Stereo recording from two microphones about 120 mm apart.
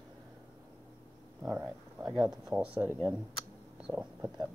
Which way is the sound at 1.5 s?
5° right (ahead or behind).